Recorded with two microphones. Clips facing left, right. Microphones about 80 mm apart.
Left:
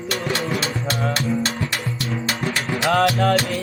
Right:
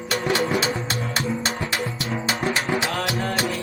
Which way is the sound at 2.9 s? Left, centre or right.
Left.